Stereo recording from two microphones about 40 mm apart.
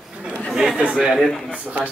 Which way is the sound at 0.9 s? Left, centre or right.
Centre.